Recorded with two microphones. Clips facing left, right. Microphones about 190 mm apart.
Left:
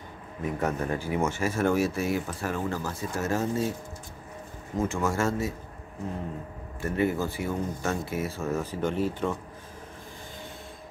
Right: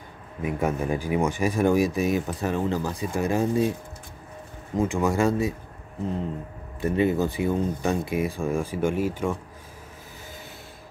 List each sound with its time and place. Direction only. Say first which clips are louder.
0.4 s speech: right 3 dB; 10° right (ahead or behind)
4.7 s speech: right 4 dB; 15° right (ahead or behind)
6.8 s speech: right 4 dB; 20° right (ahead or behind)